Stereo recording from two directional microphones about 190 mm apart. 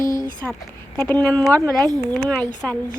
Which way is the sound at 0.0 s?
45° left (ahead or behind).